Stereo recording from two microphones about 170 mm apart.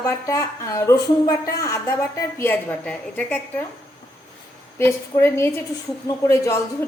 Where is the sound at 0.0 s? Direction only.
20° left (ahead or behind).